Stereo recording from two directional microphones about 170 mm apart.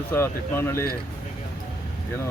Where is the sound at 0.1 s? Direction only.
15° left (ahead or behind).